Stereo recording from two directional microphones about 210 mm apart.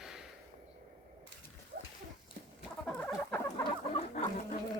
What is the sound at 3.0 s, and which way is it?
Chicken, 5° left (ahead or behind).